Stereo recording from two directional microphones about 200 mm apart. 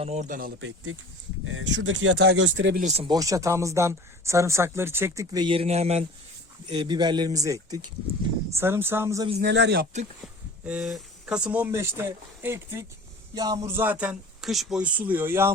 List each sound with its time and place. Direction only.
0.0 s speech: 35° right (ahead or behind)
1.5 s speech: 70° right (ahead or behind)
2.8 s speech: 25° right (ahead or behind)
6.7 s speech: 20° right (ahead or behind)
9.4 s speech: 60° right (ahead or behind)
10.7 s speech: 5° right (ahead or behind)